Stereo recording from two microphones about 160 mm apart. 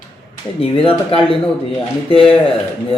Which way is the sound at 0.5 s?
35° left (ahead or behind).